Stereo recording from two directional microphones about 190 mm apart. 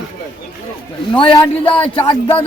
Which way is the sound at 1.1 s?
25° left (ahead or behind).